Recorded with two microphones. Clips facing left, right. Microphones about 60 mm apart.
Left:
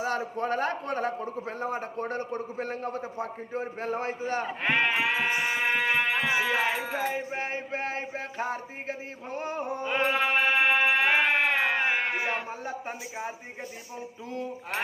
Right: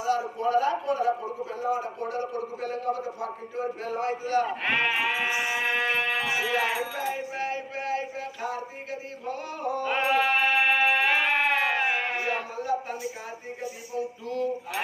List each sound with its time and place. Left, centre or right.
0.0 s a man's voice: left
4.6 s speech: centre
5.6 s a sound: centre
6.2 s music: left
6.7 s music: left
7.1 s a man's voice: left
10.0 s music: centre